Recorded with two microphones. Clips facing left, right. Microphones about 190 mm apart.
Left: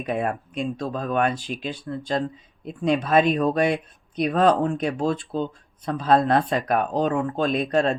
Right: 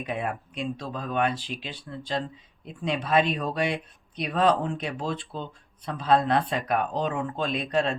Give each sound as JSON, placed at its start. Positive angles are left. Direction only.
{"t": 0.1, "sound": "speech", "side_deg": 45}